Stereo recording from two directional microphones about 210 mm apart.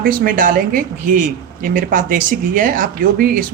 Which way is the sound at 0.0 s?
40° right (ahead or behind).